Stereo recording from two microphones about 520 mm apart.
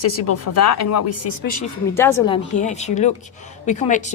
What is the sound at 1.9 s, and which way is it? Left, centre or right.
A woman's voice, centre.